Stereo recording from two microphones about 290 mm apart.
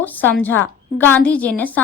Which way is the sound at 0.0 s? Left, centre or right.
Centre.